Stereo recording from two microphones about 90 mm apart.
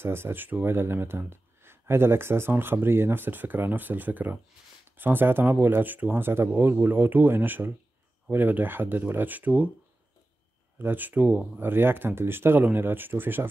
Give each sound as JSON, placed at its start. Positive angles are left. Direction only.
{"t": 0.0, "sound": "speech", "side_deg": -25}
{"t": 10.8, "sound": "speech", "side_deg": -20}